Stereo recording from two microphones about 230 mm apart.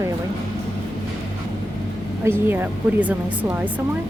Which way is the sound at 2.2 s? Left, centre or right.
Centre.